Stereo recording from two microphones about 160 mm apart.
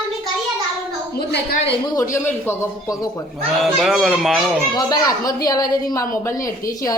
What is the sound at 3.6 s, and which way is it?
Speech, centre (ahead or behind).